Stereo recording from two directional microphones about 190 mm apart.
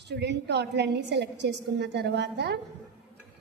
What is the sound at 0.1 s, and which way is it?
A woman's voice, 60° right (ahead or behind).